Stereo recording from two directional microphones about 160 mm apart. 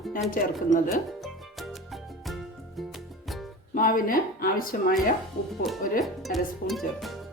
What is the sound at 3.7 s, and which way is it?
Speech, 60° left (ahead or behind).